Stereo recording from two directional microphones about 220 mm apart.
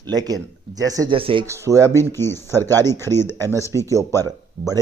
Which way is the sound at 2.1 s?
10° left (ahead or behind).